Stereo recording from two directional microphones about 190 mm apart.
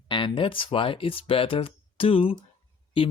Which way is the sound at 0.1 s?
25° left (ahead or behind).